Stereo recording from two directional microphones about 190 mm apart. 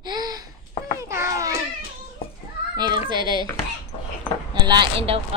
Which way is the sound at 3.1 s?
25° right (ahead or behind).